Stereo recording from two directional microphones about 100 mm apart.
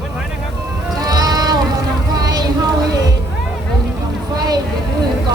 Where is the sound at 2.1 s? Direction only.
40° right (ahead or behind).